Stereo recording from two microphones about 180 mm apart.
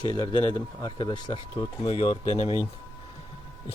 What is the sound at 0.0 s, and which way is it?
Speech, 25° left (ahead or behind).